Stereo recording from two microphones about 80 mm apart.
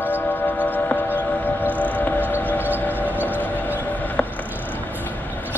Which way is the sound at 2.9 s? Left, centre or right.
Right.